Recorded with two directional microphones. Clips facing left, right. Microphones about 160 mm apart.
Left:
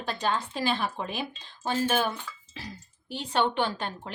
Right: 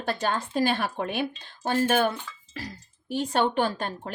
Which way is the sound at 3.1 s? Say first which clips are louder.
Right 3 dB; 45° right (ahead or behind).